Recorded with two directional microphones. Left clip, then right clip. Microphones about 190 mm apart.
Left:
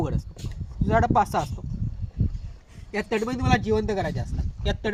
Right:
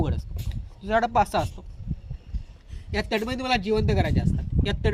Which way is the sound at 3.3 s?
10° right (ahead or behind).